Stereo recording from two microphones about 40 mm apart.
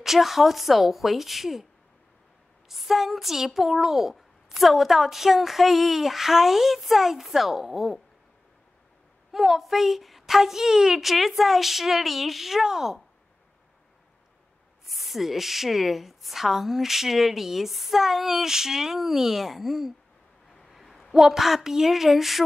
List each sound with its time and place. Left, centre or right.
0.0 s speech: centre
2.7 s speech: centre
9.3 s speech: centre
14.9 s speech: centre
20.6 s a sound: centre
21.1 s speech: centre